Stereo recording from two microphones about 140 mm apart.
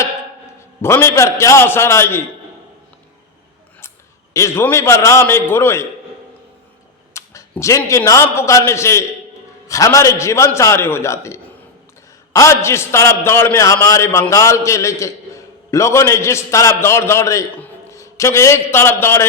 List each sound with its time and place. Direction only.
0.8 s a man's voice: 20° left (ahead or behind)
4.4 s a man's voice: 20° left (ahead or behind)
7.1 s a man's voice: 20° left (ahead or behind)